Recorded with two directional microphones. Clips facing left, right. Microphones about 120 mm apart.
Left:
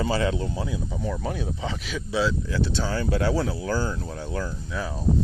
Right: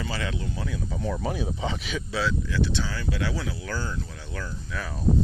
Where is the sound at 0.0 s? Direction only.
35° left (ahead or behind).